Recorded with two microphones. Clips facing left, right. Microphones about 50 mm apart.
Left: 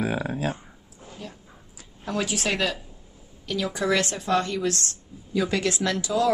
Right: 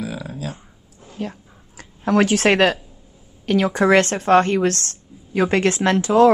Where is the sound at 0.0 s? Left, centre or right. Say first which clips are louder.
Left 3 dB; left.